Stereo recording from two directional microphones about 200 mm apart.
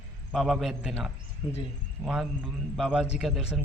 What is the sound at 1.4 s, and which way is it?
Speech, 20° left (ahead or behind).